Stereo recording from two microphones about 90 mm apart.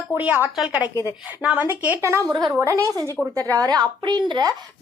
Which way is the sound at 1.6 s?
20° right (ahead or behind).